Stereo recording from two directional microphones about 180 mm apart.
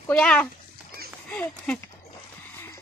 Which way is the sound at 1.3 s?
10° left (ahead or behind).